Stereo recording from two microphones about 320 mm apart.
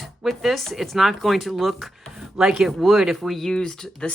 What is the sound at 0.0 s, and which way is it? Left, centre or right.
Speech, centre.